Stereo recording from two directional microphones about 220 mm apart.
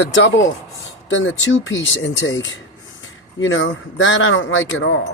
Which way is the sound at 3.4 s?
60° left (ahead or behind).